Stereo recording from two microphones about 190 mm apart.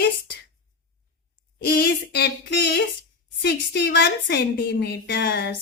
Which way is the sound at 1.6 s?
55° left (ahead or behind).